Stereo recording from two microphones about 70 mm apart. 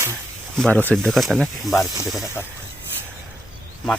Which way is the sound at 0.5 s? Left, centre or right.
Centre.